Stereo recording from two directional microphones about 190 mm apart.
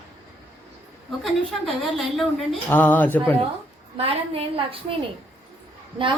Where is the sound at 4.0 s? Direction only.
30° right (ahead or behind).